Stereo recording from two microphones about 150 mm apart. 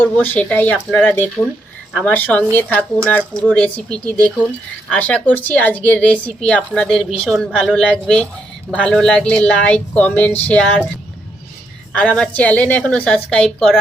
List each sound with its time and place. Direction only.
0.0 s a woman's voice: 10° left (ahead or behind)
11.9 s speech: 5° left (ahead or behind)